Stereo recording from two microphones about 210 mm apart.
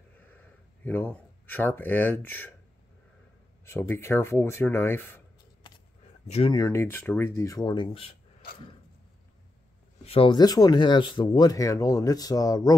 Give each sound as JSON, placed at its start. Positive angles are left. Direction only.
{"t": 0.3, "sound": "speech", "side_deg": 10}
{"t": 3.6, "sound": "speech", "side_deg": 10}
{"t": 6.2, "sound": "speech", "side_deg": 30}
{"t": 6.5, "sound": "speech", "side_deg": 15}
{"t": 10.0, "sound": "speech", "side_deg": 25}